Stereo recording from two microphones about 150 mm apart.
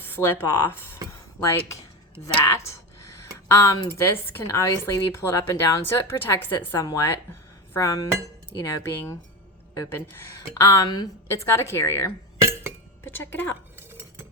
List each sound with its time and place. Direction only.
0.2 s a woman's voice: 15° left (ahead or behind)
2.4 s a woman's voice: 20° left (ahead or behind)
12.4 s chink: 15° right (ahead or behind)
13.1 s a woman's voice: 15° left (ahead or behind)
13.7 s chink: 15° right (ahead or behind)